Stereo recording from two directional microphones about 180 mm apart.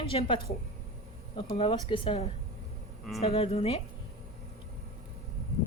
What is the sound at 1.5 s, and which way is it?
Speech, 30° left (ahead or behind).